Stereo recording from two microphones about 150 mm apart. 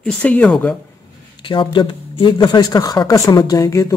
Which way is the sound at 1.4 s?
35° left (ahead or behind).